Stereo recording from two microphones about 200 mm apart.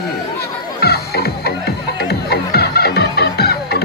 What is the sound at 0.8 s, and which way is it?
Music, 50° left (ahead or behind).